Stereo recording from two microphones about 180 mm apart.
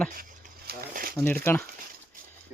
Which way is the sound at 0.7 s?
55° right (ahead or behind).